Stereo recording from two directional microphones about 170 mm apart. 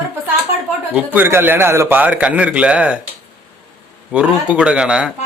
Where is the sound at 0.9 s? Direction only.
10° right (ahead or behind).